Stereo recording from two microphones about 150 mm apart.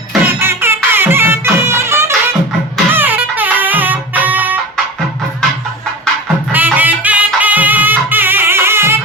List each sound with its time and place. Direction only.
0.3 s music: 15° right (ahead or behind)
6.2 s music: 10° right (ahead or behind)